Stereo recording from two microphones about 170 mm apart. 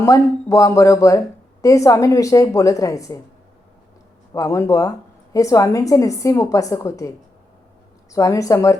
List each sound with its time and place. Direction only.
0.0 s a woman's voice: 20° left (ahead or behind)
4.4 s a woman's voice: 15° left (ahead or behind)
8.1 s a woman's voice: 20° left (ahead or behind)